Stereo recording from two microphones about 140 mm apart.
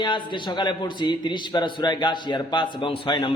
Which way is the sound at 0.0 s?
35° left (ahead or behind).